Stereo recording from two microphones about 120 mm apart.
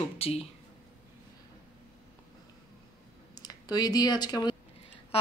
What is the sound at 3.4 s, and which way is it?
Speech, 30° left (ahead or behind).